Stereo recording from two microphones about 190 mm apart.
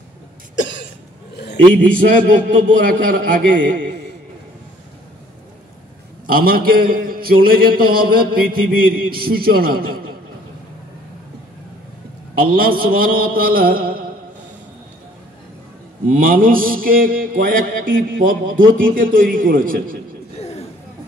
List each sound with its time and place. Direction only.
0.6 s cough: 75° left (ahead or behind)
1.9 s a man's voice: 45° right (ahead or behind)
6.2 s a man's voice: 50° right (ahead or behind)
12.4 s a man's voice: 50° right (ahead or behind)
16.1 s a man's voice: 45° right (ahead or behind)
20.3 s chatter: 35° left (ahead or behind)